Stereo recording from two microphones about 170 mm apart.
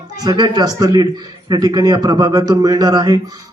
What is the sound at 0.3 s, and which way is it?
Speech, 25° right (ahead or behind).